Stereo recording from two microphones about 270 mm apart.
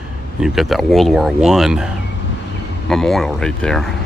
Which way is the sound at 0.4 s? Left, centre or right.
Centre.